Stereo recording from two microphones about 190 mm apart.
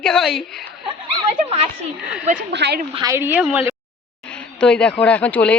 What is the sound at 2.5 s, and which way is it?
Speech, 60° right (ahead or behind).